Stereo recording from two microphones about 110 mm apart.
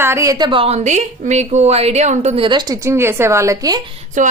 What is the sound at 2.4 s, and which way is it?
Speech, 40° right (ahead or behind).